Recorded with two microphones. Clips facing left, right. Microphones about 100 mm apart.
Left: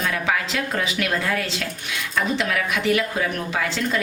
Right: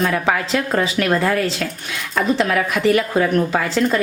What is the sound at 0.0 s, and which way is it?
Speech, 40° right (ahead or behind).